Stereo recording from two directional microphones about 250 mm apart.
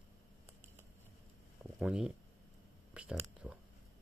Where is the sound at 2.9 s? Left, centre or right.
Centre.